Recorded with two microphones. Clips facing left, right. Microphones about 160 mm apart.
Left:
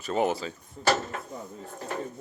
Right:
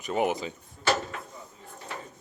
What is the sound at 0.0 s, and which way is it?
Speech, 15° right (ahead or behind).